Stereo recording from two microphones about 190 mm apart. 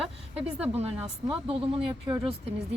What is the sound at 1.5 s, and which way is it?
Speech, 30° right (ahead or behind).